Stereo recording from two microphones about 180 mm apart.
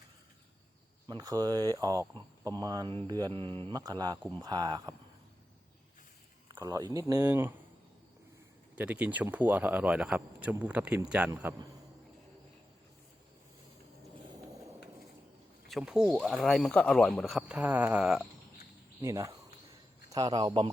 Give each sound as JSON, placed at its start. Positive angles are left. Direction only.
{"t": 1.0, "sound": "speech", "side_deg": -20}
{"t": 6.5, "sound": "speech", "side_deg": -20}
{"t": 8.7, "sound": "speech", "side_deg": -5}
{"t": 15.7, "sound": "speech", "side_deg": -5}
{"t": 19.0, "sound": "speech", "side_deg": -15}